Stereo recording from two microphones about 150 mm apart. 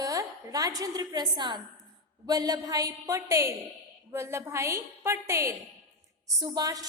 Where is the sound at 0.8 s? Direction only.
25° right (ahead or behind).